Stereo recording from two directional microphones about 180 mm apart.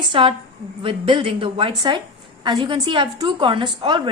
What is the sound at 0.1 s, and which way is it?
A woman's voice, 30° right (ahead or behind).